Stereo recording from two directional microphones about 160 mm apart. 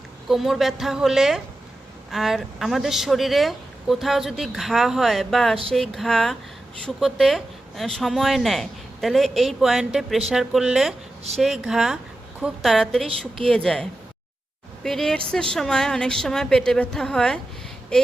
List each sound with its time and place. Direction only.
0.3 s speech: centre (ahead or behind)
14.8 s speech: centre (ahead or behind)